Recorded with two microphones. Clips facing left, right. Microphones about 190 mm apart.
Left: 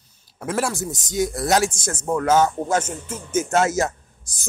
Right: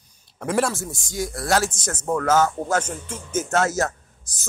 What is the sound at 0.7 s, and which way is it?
Speech, 20° left (ahead or behind).